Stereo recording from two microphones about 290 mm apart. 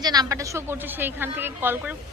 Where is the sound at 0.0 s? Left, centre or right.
Centre.